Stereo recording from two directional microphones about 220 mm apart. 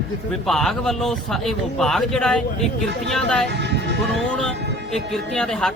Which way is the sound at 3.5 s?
50° right (ahead or behind).